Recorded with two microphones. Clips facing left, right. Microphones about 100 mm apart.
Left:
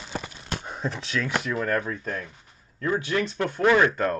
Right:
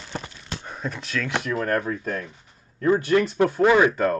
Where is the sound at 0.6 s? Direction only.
25° left (ahead or behind).